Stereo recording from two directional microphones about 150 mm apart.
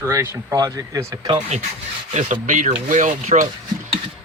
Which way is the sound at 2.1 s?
55° right (ahead or behind).